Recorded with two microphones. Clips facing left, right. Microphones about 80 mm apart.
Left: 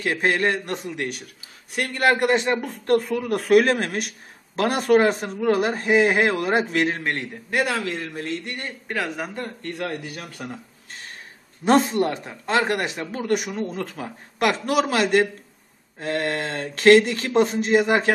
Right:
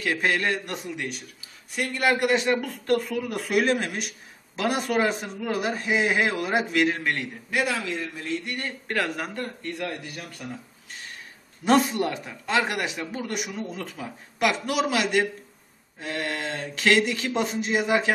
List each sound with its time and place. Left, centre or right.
0.0 s a man's voice: left
0.8 s a man's voice: centre
1.8 s speech: left
6.7 s a man's voice: left
7.5 s speech: left
8.6 s a man's voice: centre
9.8 s speech: left
11.6 s a man's voice: left